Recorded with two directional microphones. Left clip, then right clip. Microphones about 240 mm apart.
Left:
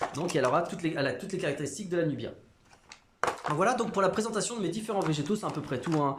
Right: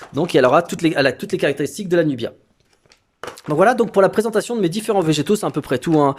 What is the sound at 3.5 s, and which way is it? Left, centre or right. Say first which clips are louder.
Speech: right 15 dB; right.